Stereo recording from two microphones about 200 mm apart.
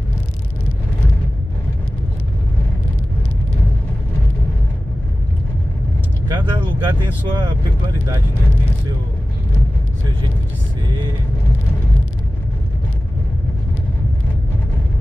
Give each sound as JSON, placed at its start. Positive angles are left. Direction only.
{"t": 6.2, "sound": "speech", "side_deg": -20}